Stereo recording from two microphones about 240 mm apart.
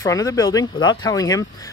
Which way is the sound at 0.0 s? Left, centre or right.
Centre.